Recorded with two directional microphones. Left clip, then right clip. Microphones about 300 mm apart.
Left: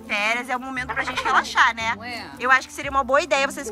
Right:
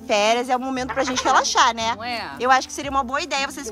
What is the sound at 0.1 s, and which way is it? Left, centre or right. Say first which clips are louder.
Speech: right 4 dB; centre.